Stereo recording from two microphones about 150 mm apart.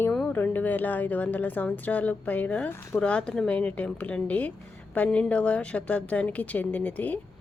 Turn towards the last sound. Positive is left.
turn(degrees=10)  # may be behind; listen again after turning